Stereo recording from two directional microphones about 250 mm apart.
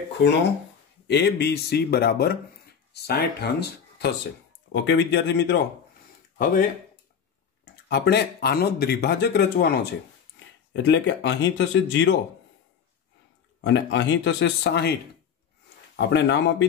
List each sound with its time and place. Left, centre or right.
1.0 s speech: left
7.9 s speech: left
13.7 s speech: left
16.0 s speech: left